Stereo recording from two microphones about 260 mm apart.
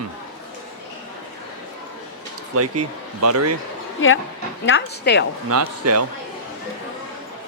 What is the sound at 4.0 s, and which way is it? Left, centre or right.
A woman's voice, left.